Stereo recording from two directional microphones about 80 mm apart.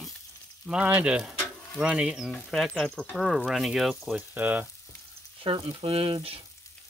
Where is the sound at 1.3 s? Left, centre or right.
Centre.